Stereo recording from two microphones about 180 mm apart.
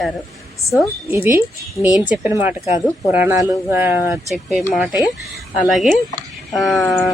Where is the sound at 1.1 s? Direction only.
10° right (ahead or behind).